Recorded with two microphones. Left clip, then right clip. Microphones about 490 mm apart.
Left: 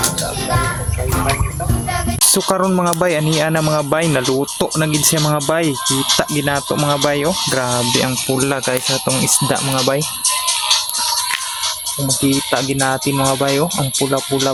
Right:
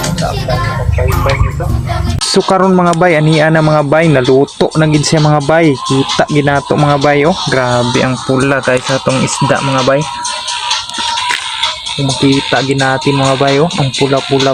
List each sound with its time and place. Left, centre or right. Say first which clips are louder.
2.3 s speech: right 9 dB; left
12.5 s speech: right 6 dB; left